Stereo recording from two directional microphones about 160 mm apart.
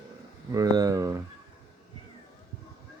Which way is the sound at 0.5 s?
25° right (ahead or behind).